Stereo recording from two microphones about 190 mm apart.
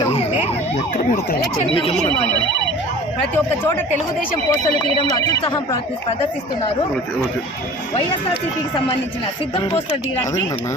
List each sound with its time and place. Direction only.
0.0 s emergency vehicle: 35° left (ahead or behind)
1.7 s speech: 30° left (ahead or behind)
3.3 s speech: 10° left (ahead or behind)
5.1 s speech: 20° left (ahead or behind)